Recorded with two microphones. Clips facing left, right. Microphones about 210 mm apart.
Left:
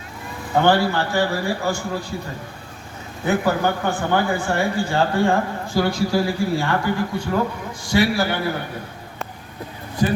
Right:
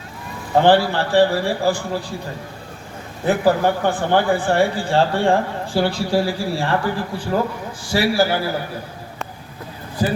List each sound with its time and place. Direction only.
0.5 s a man's voice: 30° right (ahead or behind)
3.2 s a man's voice: 35° right (ahead or behind)
10.0 s a sound: 35° right (ahead or behind)